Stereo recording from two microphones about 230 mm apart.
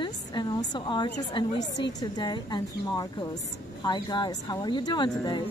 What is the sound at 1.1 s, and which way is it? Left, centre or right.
Speech, left.